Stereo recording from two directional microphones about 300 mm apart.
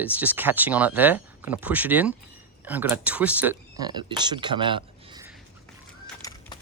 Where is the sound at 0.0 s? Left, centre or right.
Centre.